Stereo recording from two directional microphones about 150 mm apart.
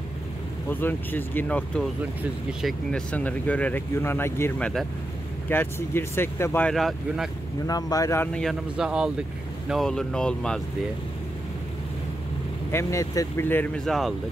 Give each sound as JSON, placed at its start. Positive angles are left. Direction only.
{"t": 0.7, "sound": "speech", "side_deg": 15}
{"t": 2.6, "sound": "speech", "side_deg": 5}
{"t": 6.7, "sound": "speech", "side_deg": 0}
{"t": 7.6, "sound": "speech", "side_deg": 25}
{"t": 8.3, "sound": "speech", "side_deg": 5}
{"t": 12.7, "sound": "speech", "side_deg": 20}
{"t": 13.8, "sound": "speech", "side_deg": 0}